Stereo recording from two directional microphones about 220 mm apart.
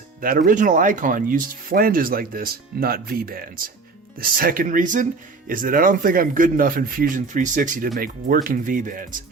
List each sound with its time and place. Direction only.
0.2 s speech: 40° right (ahead or behind)